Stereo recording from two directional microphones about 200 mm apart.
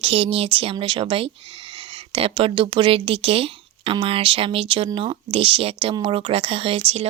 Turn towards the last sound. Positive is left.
turn(degrees=-30)  # may be behind; listen again after turning